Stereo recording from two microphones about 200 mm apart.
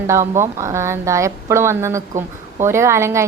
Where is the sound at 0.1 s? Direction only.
15° right (ahead or behind).